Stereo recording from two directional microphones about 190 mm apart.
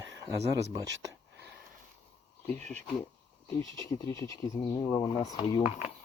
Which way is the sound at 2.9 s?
15° left (ahead or behind).